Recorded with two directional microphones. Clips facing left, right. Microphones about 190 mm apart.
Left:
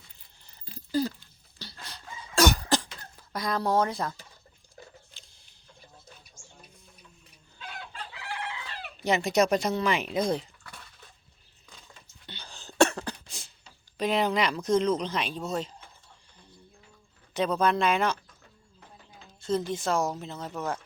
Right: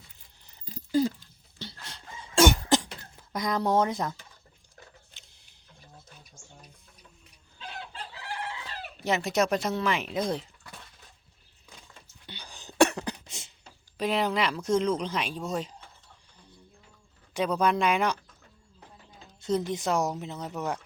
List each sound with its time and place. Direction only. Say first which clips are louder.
0.9 s a sound: right 3 dB; 20° right (ahead or behind)
1.5 s cough: right 2 dB; 25° right (ahead or behind)
7.6 s chicken: right 1 dB; 30° right (ahead or behind)
9.0 s speech: left 2 dB; centre (ahead or behind)
12.2 s cough: even; 10° right (ahead or behind)
14.0 s speech: left 1 dB; 5° right (ahead or behind)
17.3 s speech: even; 10° right (ahead or behind)
19.4 s a woman's voice: even; 20° right (ahead or behind)